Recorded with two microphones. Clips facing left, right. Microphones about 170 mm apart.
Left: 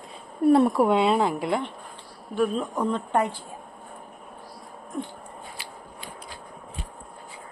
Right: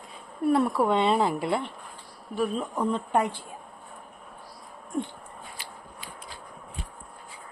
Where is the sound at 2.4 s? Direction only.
5° right (ahead or behind).